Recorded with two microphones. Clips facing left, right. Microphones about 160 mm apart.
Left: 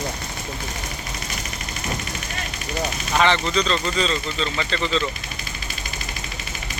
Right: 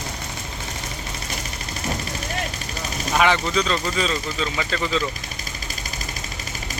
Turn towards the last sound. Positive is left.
turn(degrees=-10)  # may be behind; listen again after turning